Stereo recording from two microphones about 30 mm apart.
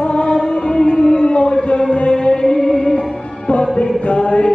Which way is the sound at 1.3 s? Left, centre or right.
Left.